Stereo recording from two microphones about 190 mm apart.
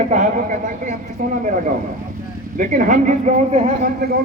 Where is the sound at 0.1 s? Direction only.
40° right (ahead or behind).